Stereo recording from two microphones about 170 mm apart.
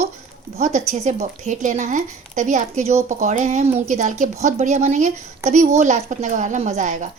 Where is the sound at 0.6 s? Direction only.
40° right (ahead or behind).